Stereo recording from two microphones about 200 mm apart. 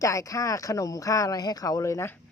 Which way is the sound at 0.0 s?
15° left (ahead or behind).